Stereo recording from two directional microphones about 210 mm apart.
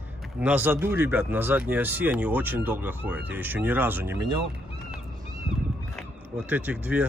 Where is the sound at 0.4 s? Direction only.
10° right (ahead or behind).